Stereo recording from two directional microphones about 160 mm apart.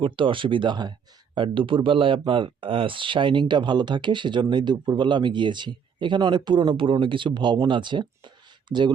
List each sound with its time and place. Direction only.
0.0 s speech: 30° right (ahead or behind)